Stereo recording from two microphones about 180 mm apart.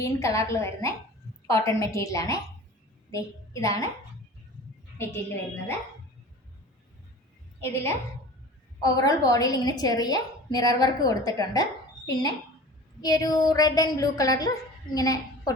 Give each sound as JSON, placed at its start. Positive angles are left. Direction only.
{"t": 0.0, "sound": "a woman's voice", "side_deg": 15}
{"t": 4.9, "sound": "a woman's voice", "side_deg": 15}
{"t": 8.8, "sound": "a woman's voice", "side_deg": 20}